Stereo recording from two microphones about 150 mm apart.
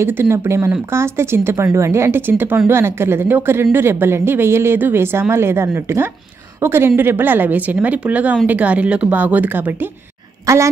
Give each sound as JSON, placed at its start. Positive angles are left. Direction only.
{"t": 0.0, "sound": "a woman's voice", "side_deg": -15}